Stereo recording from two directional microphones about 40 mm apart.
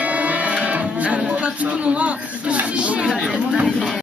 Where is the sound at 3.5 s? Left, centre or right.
Centre.